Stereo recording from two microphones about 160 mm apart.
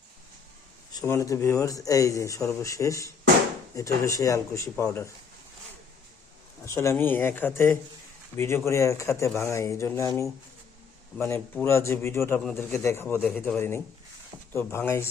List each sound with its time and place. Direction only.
0.9 s speech: 15° left (ahead or behind)
6.7 s speech: 15° left (ahead or behind)